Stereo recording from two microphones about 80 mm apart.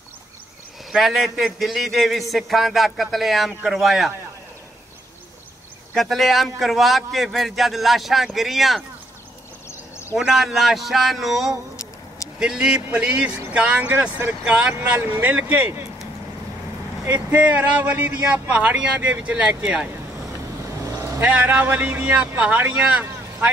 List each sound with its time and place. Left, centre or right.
0.9 s speech: centre
5.9 s speech: centre
9.7 s a sound: left
10.1 s speech: centre; by 15.8 s right
17.0 s speech: right
21.2 s speech: centre